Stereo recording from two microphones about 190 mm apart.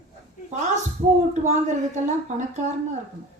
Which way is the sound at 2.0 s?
40° right (ahead or behind).